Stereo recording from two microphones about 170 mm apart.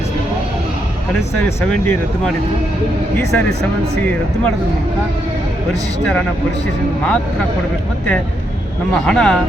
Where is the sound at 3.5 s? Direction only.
70° right (ahead or behind).